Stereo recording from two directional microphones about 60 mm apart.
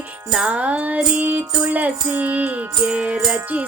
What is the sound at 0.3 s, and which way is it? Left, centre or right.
Music, centre.